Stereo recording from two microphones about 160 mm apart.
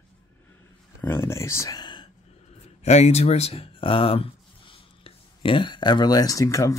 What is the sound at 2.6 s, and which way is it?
Speech, 45° left (ahead or behind).